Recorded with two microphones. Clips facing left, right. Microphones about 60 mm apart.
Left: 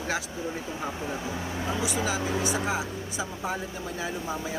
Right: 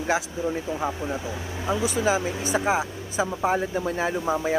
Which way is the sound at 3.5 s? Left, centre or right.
Right.